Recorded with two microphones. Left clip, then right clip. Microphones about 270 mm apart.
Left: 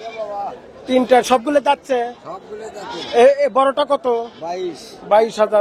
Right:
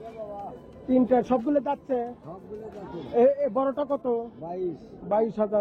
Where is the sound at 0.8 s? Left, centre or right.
Centre.